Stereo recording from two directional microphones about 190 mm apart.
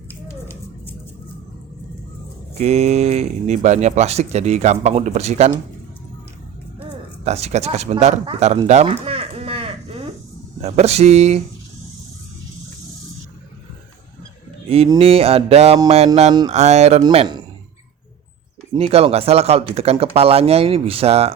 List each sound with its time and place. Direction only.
0.3 s a sound: 10° left (ahead or behind)
2.6 s speech: 35° right (ahead or behind)
7.3 s speech: 35° right (ahead or behind)
8.6 s a sound: 35° right (ahead or behind)
10.6 s speech: 35° right (ahead or behind)
14.9 s speech: 30° right (ahead or behind)
18.7 s speech: 30° right (ahead or behind)